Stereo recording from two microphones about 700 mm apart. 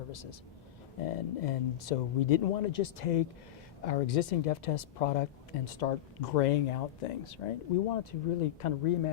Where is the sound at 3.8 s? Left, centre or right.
Left.